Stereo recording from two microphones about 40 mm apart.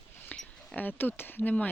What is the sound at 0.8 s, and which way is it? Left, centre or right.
Speech, left.